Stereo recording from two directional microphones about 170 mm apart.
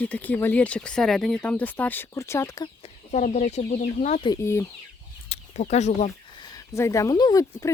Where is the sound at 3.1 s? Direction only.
45° left (ahead or behind).